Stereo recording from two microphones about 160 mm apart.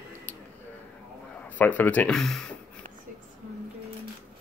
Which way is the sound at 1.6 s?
10° left (ahead or behind).